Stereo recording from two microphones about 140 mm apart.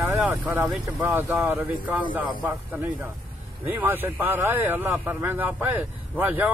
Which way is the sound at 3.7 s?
15° right (ahead or behind).